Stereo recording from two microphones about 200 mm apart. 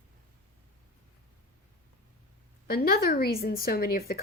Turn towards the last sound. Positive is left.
turn(degrees=50)  # may be behind; listen again after turning